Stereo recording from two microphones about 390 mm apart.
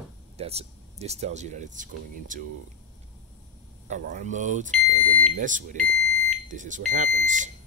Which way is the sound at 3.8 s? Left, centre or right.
Centre.